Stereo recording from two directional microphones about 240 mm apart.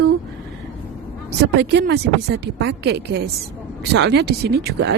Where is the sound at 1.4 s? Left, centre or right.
Right.